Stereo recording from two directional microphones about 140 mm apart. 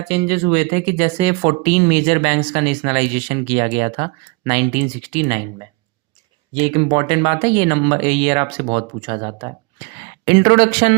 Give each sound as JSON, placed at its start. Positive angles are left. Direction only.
{"t": 0.2, "sound": "speech", "side_deg": -40}
{"t": 10.2, "sound": "speech", "side_deg": -30}
{"t": 10.8, "sound": "speech", "side_deg": -45}